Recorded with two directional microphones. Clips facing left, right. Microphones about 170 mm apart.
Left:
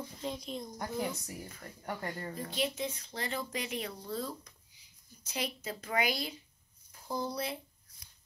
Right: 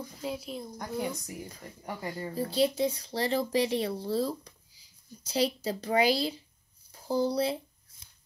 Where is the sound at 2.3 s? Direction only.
35° right (ahead or behind).